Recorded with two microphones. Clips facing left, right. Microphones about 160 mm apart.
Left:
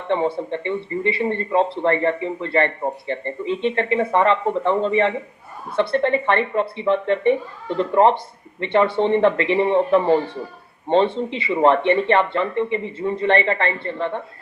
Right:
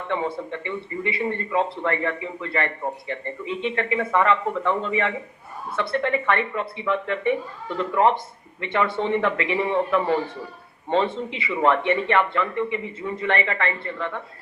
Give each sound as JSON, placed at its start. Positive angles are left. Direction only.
{"t": 0.1, "sound": "a man's voice", "side_deg": 30}